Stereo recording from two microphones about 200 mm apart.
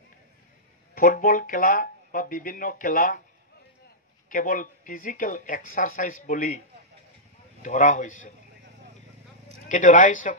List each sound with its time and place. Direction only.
0.9 s speech: 45° left (ahead or behind)
4.3 s speech: 40° left (ahead or behind)
7.6 s speech: 40° left (ahead or behind)
9.7 s speech: 40° left (ahead or behind)